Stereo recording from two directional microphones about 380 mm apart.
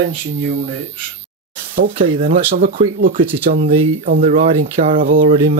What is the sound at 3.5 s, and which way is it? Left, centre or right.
Speech, centre.